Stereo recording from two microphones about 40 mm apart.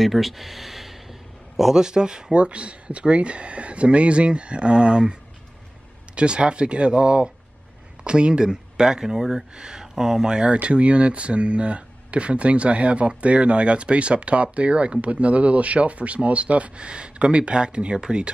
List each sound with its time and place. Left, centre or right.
0.0 s speech: centre; by 5.1 s right
6.1 s speech: right